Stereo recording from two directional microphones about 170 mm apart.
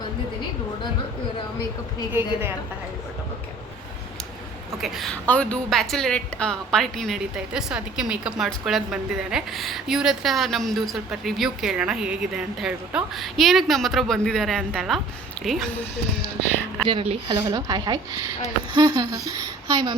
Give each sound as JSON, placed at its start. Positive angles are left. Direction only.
{"t": 4.8, "sound": "a woman's voice", "side_deg": 0}
{"t": 16.8, "sound": "speech", "side_deg": -35}